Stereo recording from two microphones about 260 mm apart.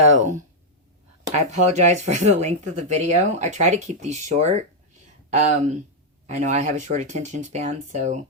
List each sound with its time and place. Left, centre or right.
1.3 s speech: right